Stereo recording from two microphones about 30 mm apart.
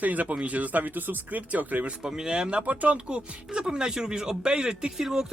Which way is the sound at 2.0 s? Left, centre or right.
Right.